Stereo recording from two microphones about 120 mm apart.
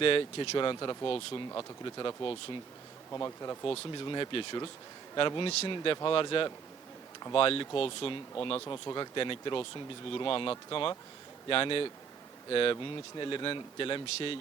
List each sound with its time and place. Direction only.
0.0 s speech: 50° left (ahead or behind)
3.1 s speech: 25° left (ahead or behind)
3.9 s speech: 40° left (ahead or behind)
8.6 s speech: 30° left (ahead or behind)
9.1 s speech: 45° left (ahead or behind)